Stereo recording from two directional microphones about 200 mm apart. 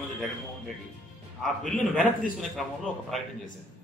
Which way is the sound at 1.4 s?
Centre (ahead or behind).